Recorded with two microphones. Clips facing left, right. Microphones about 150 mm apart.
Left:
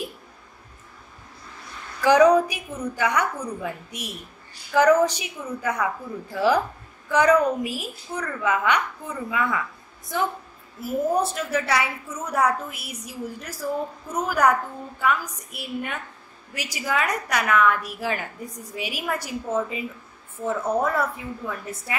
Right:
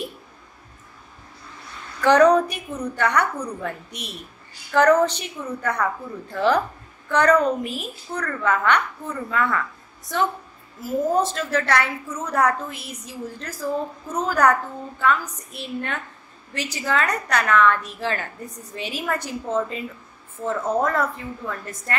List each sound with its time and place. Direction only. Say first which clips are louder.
2.0 s a woman's voice: right 1 dB; 10° left (ahead or behind)
4.7 s a woman's voice: right 1 dB; 10° left (ahead or behind)